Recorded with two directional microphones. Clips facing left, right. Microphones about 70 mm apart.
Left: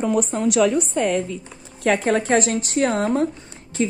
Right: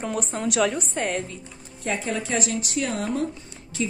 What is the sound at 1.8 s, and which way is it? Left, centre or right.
A woman's voice, left.